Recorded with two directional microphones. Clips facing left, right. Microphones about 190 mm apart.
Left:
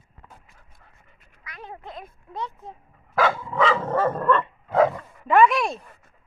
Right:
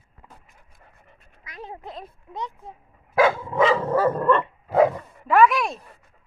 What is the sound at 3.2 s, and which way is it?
Dog, 15° right (ahead or behind).